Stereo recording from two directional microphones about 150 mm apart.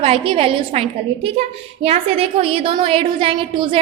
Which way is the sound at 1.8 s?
40° right (ahead or behind).